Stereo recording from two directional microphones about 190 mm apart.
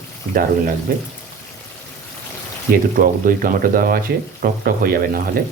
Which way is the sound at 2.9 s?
45° right (ahead or behind).